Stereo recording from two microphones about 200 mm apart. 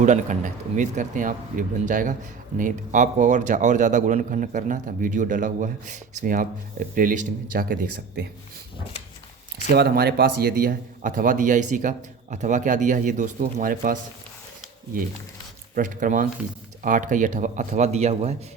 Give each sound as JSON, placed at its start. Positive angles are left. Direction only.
{"t": 0.0, "sound": "a man's voice", "side_deg": -35}
{"t": 9.7, "sound": "a man's voice", "side_deg": -50}
{"t": 15.7, "sound": "a man's voice", "side_deg": -40}